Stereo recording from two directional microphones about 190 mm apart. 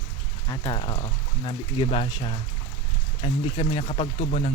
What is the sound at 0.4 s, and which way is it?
Speech, 25° left (ahead or behind).